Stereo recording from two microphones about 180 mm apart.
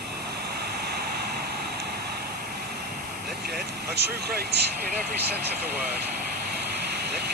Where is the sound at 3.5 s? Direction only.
65° right (ahead or behind).